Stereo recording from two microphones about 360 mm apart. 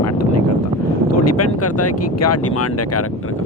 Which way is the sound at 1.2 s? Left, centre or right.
Left.